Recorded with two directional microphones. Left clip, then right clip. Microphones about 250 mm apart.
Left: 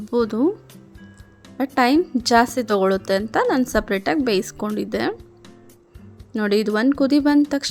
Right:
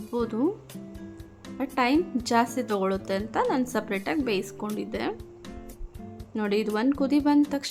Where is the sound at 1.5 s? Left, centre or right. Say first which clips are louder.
Left 7 dB; left.